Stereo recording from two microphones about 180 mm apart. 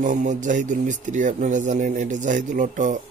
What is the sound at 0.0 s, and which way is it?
A man's voice, 45° right (ahead or behind).